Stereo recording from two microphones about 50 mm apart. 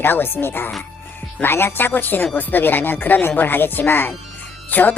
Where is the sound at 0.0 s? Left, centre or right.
Left.